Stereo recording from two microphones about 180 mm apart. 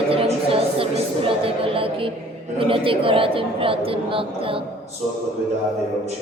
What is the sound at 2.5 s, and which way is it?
Speech, 30° right (ahead or behind).